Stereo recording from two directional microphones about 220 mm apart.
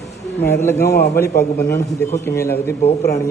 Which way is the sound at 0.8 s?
45° left (ahead or behind).